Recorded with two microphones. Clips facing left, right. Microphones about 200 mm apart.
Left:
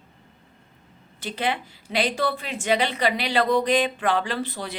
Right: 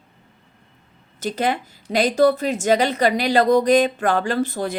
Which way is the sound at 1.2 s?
45° right (ahead or behind).